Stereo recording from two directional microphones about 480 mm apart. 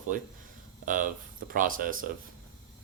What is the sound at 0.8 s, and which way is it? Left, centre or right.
Speech, centre.